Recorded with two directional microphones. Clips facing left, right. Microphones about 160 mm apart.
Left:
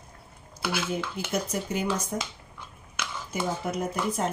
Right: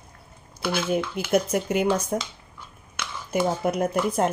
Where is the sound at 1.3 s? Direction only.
60° right (ahead or behind).